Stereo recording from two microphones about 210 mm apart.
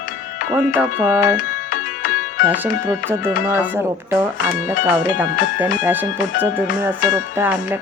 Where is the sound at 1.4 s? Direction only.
40° left (ahead or behind).